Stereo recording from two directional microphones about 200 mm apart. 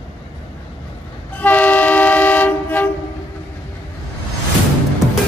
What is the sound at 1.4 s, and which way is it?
Train, 10° left (ahead or behind).